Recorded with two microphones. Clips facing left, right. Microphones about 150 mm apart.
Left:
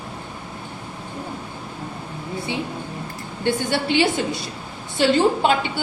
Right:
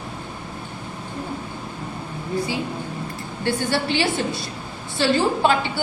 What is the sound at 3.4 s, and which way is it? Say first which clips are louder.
A woman's voice: left 1 dB; 20° left (ahead or behind).